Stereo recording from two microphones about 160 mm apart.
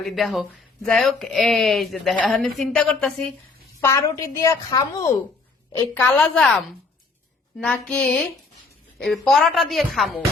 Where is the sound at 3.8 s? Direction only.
20° left (ahead or behind).